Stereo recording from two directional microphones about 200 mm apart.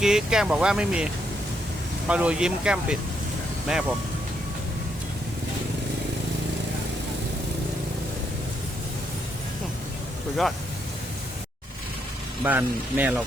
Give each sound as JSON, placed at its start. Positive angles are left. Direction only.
{"t": 0.0, "sound": "speech", "side_deg": -5}
{"t": 12.5, "sound": "speech", "side_deg": -10}